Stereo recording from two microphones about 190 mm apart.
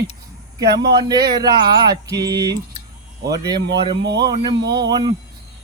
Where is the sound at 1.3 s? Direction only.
20° right (ahead or behind).